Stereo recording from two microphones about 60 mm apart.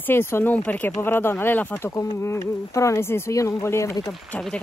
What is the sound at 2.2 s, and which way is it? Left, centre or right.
Speech, left.